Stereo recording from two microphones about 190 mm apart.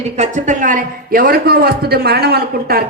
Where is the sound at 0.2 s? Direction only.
40° right (ahead or behind).